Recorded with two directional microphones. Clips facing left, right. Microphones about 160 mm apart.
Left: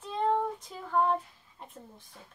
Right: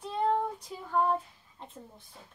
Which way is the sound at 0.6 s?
10° right (ahead or behind).